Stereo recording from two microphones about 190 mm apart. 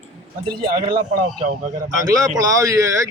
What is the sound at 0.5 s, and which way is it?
Speech, 50° right (ahead or behind).